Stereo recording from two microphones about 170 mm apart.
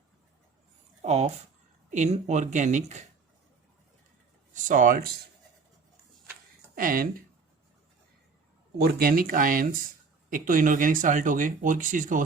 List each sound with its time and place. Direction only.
1.0 s speech: 40° right (ahead or behind)
4.5 s speech: 50° right (ahead or behind)
6.7 s speech: 55° right (ahead or behind)
8.8 s speech: 60° right (ahead or behind)